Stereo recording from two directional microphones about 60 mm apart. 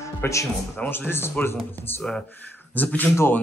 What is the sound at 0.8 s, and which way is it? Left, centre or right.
Speech, left.